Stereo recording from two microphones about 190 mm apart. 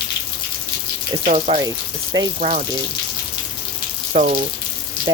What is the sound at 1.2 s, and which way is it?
Speech, 35° right (ahead or behind).